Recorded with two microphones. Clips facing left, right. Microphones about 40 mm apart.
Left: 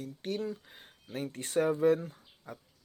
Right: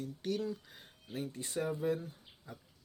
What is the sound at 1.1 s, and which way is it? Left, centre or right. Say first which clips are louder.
Speech: left 7 dB; left.